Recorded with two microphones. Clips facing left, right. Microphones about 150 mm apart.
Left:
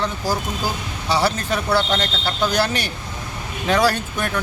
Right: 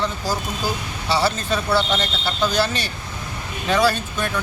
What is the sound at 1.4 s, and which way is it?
Speech, 15° left (ahead or behind).